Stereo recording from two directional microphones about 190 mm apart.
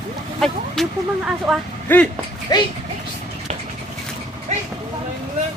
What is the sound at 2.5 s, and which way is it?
Speech, 20° left (ahead or behind).